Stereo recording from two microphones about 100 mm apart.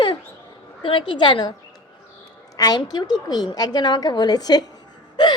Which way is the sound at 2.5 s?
40° left (ahead or behind).